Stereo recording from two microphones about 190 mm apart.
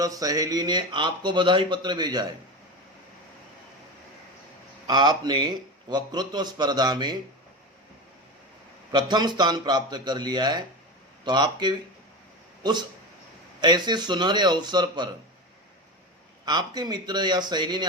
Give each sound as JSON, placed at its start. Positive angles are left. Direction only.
{"t": 0.0, "sound": "a man's voice", "side_deg": -20}
{"t": 4.9, "sound": "a man's voice", "side_deg": -20}
{"t": 8.9, "sound": "a man's voice", "side_deg": -25}
{"t": 13.6, "sound": "a man's voice", "side_deg": -20}
{"t": 16.5, "sound": "a man's voice", "side_deg": -20}